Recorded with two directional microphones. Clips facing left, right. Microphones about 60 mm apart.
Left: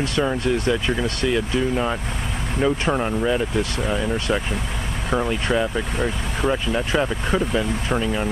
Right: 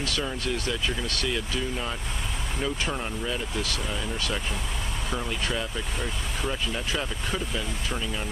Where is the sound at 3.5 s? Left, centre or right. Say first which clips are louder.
Left 8 dB; left.